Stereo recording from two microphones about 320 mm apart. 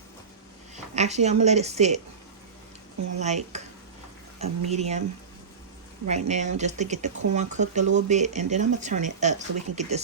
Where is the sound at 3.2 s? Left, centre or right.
Right.